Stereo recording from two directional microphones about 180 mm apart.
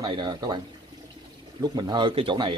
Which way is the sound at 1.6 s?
20° right (ahead or behind).